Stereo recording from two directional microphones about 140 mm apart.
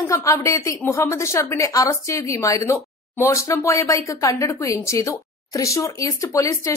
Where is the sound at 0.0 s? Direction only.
20° left (ahead or behind).